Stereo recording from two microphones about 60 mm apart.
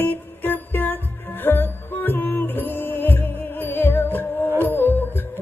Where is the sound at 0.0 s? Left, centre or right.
Left.